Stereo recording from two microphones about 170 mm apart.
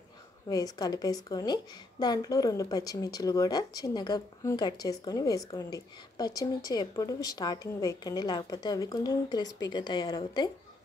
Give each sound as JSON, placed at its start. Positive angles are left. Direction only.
{"t": 0.5, "sound": "a woman's voice", "side_deg": 20}